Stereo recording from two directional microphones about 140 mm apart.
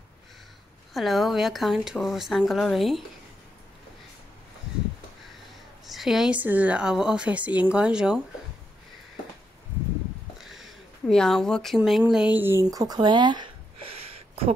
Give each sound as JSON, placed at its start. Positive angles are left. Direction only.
{"t": 0.9, "sound": "speech", "side_deg": 0}
{"t": 5.9, "sound": "speech", "side_deg": 0}
{"t": 11.1, "sound": "speech", "side_deg": 5}
{"t": 12.6, "sound": "speech", "side_deg": -30}
{"t": 13.9, "sound": "a sound", "side_deg": -45}